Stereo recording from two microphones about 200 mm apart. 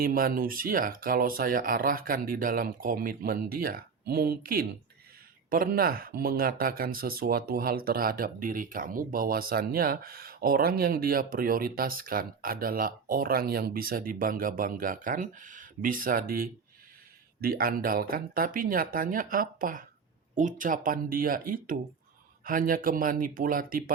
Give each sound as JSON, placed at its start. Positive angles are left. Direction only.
{"t": 0.0, "sound": "speech", "side_deg": -45}